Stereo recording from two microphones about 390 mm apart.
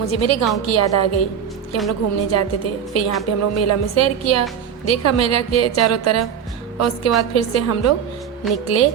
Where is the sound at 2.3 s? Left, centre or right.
Left.